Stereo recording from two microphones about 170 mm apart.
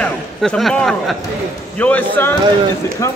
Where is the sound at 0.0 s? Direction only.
5° left (ahead or behind).